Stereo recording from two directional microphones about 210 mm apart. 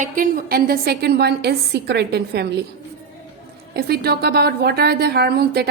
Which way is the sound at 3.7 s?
50° right (ahead or behind).